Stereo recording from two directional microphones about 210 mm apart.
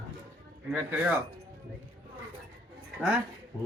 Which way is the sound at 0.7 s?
10° right (ahead or behind).